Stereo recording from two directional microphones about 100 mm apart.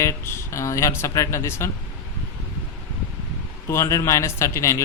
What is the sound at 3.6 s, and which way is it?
Speech, 30° left (ahead or behind).